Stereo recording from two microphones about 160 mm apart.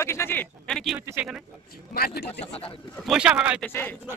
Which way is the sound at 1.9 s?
70° left (ahead or behind).